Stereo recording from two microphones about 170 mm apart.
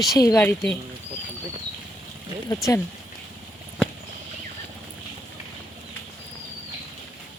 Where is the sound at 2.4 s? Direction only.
20° left (ahead or behind).